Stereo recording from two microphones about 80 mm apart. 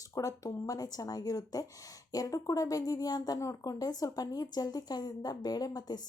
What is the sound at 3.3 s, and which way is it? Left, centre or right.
Speech, left.